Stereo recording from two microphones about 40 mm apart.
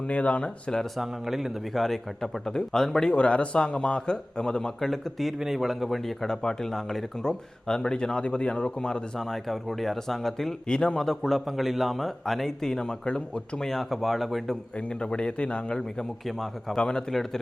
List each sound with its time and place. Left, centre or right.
0.0 s speech: left
0.9 s a man's voice: centre
3.1 s speech: left
4.9 s speech: centre
9.1 s speech: centre
10.7 s speech: centre
13.6 s speech: centre
14.8 s speech: left
16.2 s speech: centre
16.7 s speech: centre